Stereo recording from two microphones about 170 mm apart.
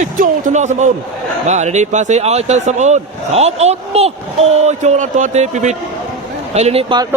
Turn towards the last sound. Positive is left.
turn(degrees=-40)  # may be behind; listen again after turning